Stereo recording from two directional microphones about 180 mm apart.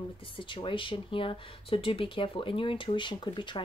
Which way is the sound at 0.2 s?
25° left (ahead or behind).